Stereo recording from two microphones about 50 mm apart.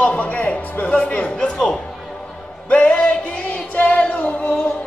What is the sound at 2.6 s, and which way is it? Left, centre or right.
Music, left.